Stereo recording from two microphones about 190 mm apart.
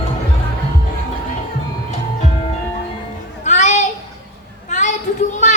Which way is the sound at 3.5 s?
40° left (ahead or behind).